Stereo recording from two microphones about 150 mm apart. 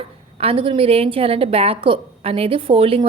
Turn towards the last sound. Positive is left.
turn(degrees=-35)  # may be behind; listen again after turning